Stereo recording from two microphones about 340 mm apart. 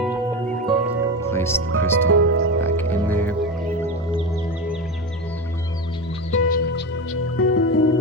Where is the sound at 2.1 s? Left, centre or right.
Right.